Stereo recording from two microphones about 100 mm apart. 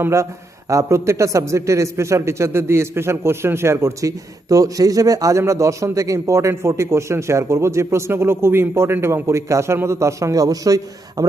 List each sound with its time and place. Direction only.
0.0 s a man's voice: 30° right (ahead or behind)